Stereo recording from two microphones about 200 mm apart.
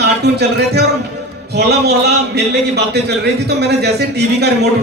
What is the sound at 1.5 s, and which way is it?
Speech, 55° right (ahead or behind).